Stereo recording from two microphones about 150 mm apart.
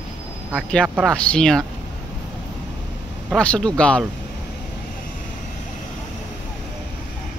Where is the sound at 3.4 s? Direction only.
5° left (ahead or behind).